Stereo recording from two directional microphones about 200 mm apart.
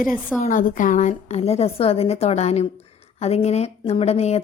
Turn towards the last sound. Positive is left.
turn(degrees=30)  # may be behind; listen again after turning